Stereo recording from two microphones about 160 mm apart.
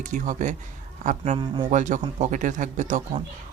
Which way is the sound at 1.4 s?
30° right (ahead or behind).